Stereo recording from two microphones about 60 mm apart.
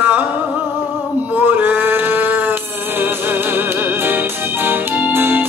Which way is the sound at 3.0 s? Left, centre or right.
Right.